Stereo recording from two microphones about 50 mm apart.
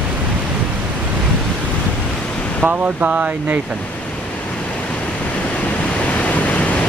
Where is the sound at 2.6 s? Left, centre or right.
Right.